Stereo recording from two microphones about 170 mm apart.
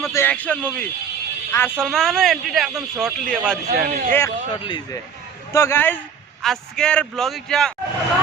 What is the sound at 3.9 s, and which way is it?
Speech, 50° right (ahead or behind).